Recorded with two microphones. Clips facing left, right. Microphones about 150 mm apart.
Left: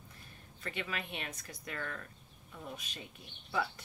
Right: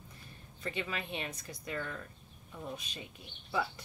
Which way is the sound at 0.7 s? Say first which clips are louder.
Right 2 dB; 25° right (ahead or behind).